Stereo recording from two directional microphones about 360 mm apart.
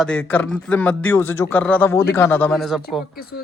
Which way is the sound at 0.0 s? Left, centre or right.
Centre.